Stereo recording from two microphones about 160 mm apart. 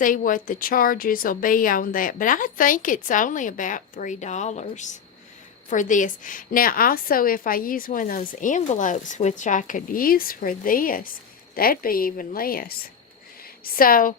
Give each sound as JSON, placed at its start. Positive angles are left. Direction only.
{"t": 0.0, "sound": "a woman's voice", "side_deg": 55}